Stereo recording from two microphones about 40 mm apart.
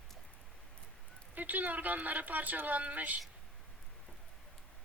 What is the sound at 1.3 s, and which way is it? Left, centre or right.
Speech, right.